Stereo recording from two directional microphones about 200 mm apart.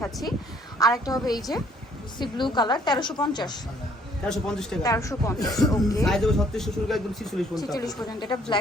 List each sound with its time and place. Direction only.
0.8 s a woman's voice: 20° left (ahead or behind)
4.3 s a man's voice: 5° left (ahead or behind)
4.8 s speech: 15° left (ahead or behind)
6.1 s a man's voice: centre (ahead or behind)
7.5 s a woman's voice: 20° left (ahead or behind)